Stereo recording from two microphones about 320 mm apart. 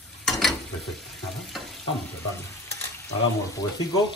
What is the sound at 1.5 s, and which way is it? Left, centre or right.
Frying, centre.